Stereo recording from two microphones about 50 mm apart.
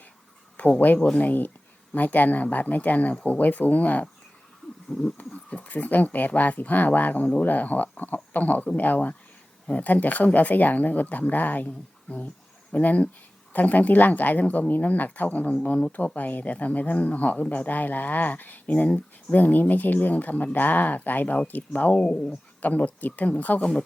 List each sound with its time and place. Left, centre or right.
0.5 s speech: left
5.1 s speech: left
21.9 s speech: centre
22.6 s speech: left